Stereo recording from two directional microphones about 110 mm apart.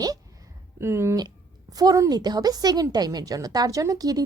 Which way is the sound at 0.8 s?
25° right (ahead or behind).